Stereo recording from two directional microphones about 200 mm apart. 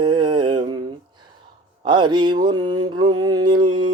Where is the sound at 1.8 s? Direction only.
25° right (ahead or behind).